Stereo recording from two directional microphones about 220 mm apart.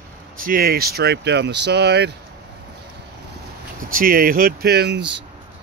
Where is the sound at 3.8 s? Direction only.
40° right (ahead or behind).